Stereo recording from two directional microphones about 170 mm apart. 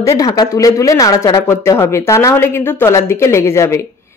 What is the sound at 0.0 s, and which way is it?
Speech, 20° left (ahead or behind).